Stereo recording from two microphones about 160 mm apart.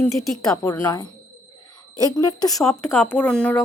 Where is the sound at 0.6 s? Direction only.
20° left (ahead or behind).